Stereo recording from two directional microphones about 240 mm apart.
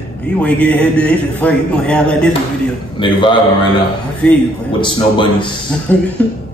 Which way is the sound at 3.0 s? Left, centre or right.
Centre.